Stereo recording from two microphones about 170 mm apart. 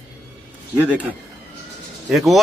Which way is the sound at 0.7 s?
10° right (ahead or behind).